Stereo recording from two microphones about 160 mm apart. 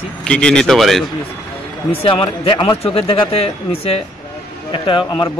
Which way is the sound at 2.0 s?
35° left (ahead or behind).